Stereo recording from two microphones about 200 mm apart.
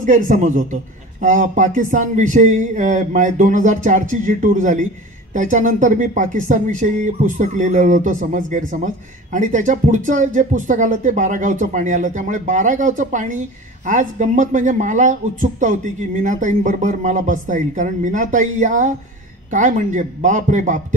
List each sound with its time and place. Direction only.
0.0 s speech: 40° right (ahead or behind)